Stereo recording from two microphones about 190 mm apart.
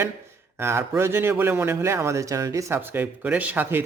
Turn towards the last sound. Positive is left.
turn(degrees=-10)  # may be behind; listen again after turning